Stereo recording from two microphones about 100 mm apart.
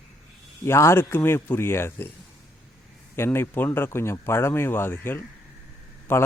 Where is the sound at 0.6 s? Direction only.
25° left (ahead or behind).